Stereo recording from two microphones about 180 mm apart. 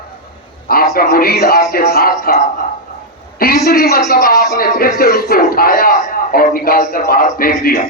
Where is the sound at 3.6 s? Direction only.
55° left (ahead or behind).